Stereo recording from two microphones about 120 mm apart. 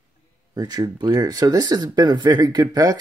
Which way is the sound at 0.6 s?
35° right (ahead or behind).